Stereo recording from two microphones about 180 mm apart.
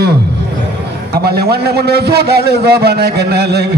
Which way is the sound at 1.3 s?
60° right (ahead or behind).